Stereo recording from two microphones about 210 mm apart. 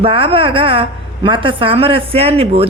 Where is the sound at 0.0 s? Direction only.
25° right (ahead or behind).